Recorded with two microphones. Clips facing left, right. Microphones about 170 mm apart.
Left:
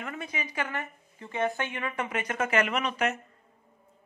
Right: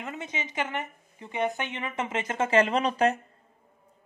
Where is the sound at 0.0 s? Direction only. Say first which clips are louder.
Right 1 dB; 20° right (ahead or behind).